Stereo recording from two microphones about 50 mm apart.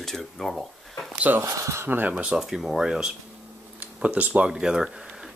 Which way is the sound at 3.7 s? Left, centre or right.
Right.